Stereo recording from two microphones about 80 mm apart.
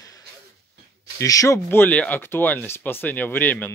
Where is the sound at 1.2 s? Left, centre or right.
Left.